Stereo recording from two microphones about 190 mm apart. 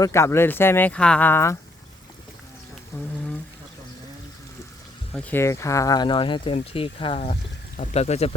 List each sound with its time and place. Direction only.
0.0 s speech: 15° left (ahead or behind)
2.9 s speech: 15° left (ahead or behind)
5.1 s speech: 10° left (ahead or behind); by 8.4 s 35° left (ahead or behind)